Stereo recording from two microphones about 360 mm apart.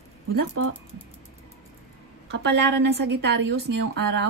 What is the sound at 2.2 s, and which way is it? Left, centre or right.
Speech, right.